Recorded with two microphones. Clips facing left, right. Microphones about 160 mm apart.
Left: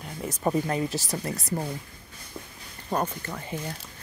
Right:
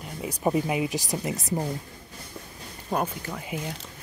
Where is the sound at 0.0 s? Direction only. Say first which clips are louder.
Right 1 dB; 10° right (ahead or behind).